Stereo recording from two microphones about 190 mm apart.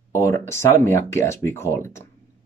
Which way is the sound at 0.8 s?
15° left (ahead or behind).